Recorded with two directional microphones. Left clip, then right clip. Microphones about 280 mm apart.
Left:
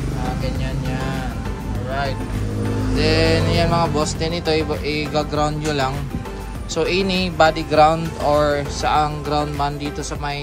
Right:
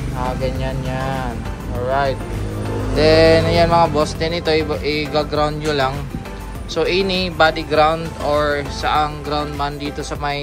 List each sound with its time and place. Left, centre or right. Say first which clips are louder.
0.9 s speech: right 4 dB; centre